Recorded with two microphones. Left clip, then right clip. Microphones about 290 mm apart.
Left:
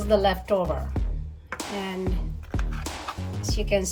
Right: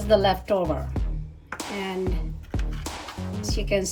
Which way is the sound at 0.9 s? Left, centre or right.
Centre.